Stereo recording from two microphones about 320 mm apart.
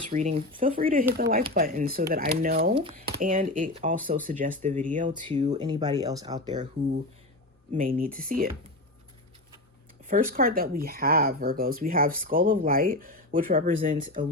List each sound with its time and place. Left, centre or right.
0.1 s speech: right
7.7 s speech: right
10.1 s speech: right